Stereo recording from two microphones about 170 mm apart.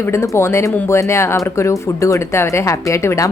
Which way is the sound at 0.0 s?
15° left (ahead or behind).